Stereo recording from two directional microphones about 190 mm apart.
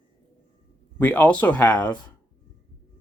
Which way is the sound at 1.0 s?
10° left (ahead or behind).